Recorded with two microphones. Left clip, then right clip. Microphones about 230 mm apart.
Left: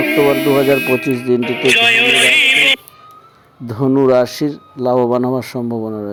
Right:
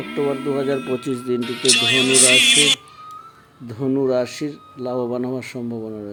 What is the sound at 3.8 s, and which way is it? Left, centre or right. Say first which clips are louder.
Speech: left 8 dB; centre.